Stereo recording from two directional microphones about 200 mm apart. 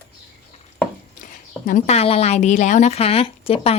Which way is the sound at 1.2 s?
40° left (ahead or behind).